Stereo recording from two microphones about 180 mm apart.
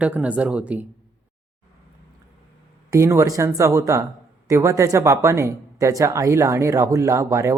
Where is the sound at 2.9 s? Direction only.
15° right (ahead or behind).